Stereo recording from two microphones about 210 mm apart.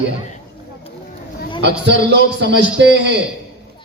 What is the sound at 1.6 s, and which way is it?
A man's voice, 55° right (ahead or behind).